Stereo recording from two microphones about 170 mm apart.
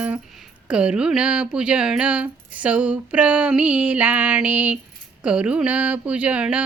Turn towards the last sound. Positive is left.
turn(degrees=-5)  # may be behind; listen again after turning